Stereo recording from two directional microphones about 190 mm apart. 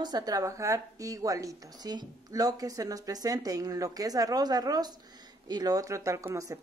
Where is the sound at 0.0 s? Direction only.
20° right (ahead or behind).